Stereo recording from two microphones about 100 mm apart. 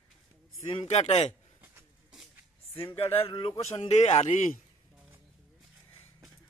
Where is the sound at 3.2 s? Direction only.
70° left (ahead or behind).